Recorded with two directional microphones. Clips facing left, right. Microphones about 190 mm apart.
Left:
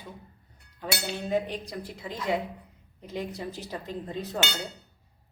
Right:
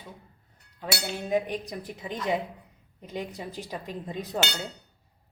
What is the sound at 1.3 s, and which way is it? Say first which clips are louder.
Speech: right 2 dB; 15° right (ahead or behind).